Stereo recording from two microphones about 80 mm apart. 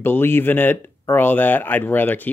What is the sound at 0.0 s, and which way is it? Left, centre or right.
Speech, left.